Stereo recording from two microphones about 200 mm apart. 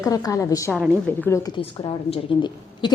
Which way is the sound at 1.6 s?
30° left (ahead or behind).